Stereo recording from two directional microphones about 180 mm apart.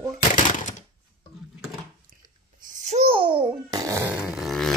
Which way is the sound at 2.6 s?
45° right (ahead or behind).